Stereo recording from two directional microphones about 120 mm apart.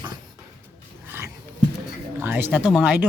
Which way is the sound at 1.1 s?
20° right (ahead or behind).